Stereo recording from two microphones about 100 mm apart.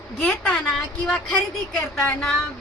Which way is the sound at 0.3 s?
5° left (ahead or behind).